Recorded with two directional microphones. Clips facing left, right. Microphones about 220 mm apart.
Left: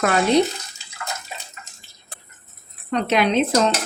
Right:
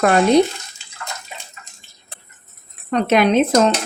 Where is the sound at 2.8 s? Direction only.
50° right (ahead or behind).